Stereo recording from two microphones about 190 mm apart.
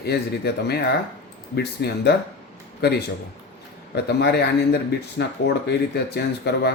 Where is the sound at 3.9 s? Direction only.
60° left (ahead or behind).